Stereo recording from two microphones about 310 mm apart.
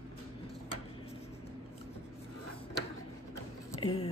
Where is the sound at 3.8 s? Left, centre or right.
Centre.